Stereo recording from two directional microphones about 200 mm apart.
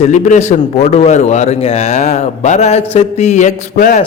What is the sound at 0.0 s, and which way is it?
A man's voice, 35° left (ahead or behind).